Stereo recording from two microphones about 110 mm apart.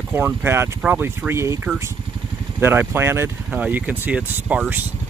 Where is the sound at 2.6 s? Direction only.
20° right (ahead or behind).